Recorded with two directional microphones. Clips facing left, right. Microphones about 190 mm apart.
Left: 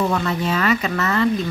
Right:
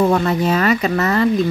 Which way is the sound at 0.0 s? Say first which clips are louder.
Right 5 dB; 40° right (ahead or behind).